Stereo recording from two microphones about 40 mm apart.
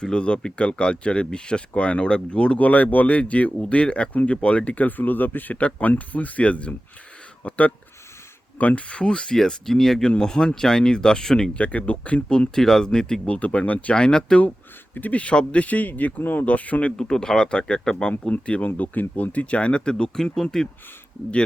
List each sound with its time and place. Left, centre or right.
0.0 s speech: left
4.1 s speech: left
4.4 s speech: left
5.5 s speech: left; by 11.5 s centre
11.5 s speech: left
12.5 s speech: centre
13.2 s speech: left
13.9 s speech: left
14.9 s speech: left
15.2 s speech: left
17.0 s speech: centre
18.3 s speech: left; by 20.7 s centre